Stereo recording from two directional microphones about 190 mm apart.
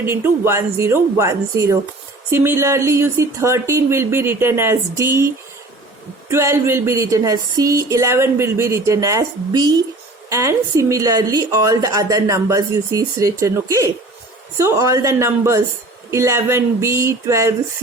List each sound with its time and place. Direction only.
0.0 s a woman's voice: 15° right (ahead or behind)
6.3 s a woman's voice: 15° right (ahead or behind)